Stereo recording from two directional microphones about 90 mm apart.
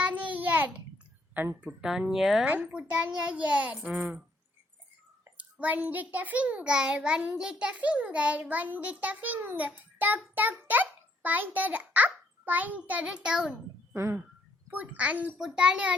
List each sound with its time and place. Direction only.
0.0 s child singing: 15° right (ahead or behind)
1.6 s a child's voice: 10° right (ahead or behind)
5.4 s a child's voice: 15° right (ahead or behind)
13.9 s speech: 30° right (ahead or behind)
14.7 s a child's voice: 15° right (ahead or behind)